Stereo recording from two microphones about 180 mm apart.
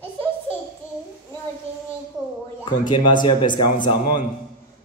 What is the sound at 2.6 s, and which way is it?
Speech, 25° left (ahead or behind).